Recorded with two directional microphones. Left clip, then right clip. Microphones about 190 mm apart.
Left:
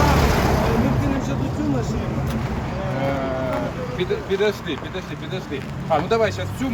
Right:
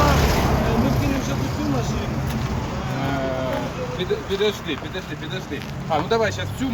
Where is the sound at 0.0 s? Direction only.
55° left (ahead or behind).